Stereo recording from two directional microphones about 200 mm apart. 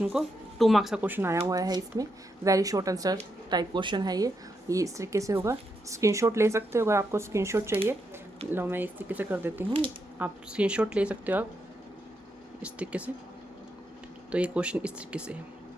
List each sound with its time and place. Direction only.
0.0 s a woman's voice: centre (ahead or behind)
12.6 s a woman's voice: 5° right (ahead or behind)
14.3 s speech: 5° right (ahead or behind)